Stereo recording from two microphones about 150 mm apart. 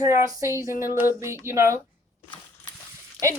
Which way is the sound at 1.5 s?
20° right (ahead or behind).